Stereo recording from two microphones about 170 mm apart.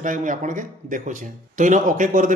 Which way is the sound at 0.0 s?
50° right (ahead or behind).